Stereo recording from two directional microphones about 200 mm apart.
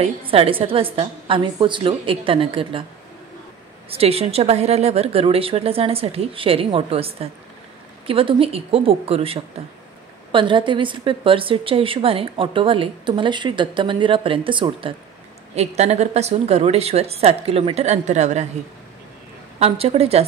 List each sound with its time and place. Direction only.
0.0 s a woman's voice: 30° right (ahead or behind)
3.9 s a woman's voice: 30° right (ahead or behind)
19.6 s a woman's voice: 30° right (ahead or behind)